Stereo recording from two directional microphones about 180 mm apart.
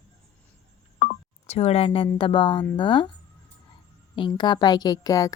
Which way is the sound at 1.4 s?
35° left (ahead or behind).